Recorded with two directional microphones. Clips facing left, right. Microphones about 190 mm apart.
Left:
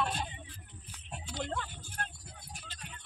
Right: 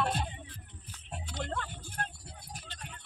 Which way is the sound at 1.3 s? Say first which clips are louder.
Even; 5° left (ahead or behind).